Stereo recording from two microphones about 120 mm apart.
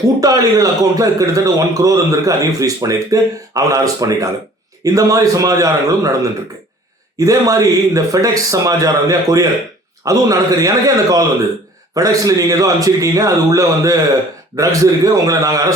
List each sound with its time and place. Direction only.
0.2 s a man's voice: 30° right (ahead or behind)
7.2 s a man's voice: 30° right (ahead or behind)